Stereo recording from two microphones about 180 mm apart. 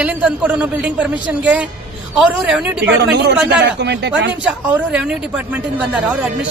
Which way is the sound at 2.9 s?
70° right (ahead or behind).